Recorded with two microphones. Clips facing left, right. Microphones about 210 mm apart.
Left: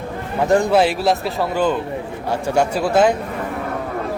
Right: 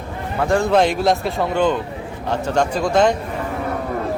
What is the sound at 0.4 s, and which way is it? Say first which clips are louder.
Speech: left 2 dB; 20° left (ahead or behind).